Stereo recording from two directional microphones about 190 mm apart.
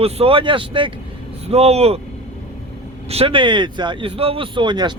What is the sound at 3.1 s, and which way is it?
Speech, 30° right (ahead or behind).